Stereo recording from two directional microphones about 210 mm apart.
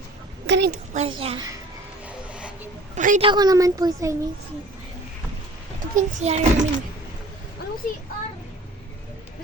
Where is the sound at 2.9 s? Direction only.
35° right (ahead or behind).